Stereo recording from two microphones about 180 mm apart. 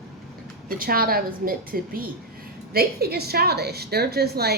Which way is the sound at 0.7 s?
55° right (ahead or behind).